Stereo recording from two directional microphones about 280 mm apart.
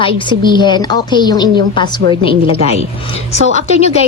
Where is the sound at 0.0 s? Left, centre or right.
Centre.